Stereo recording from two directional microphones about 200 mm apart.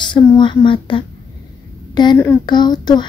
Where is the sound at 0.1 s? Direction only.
25° left (ahead or behind).